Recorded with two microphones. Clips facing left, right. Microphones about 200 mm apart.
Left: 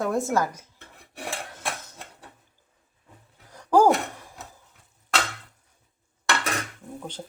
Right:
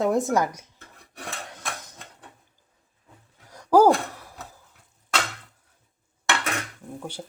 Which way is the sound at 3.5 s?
10° right (ahead or behind).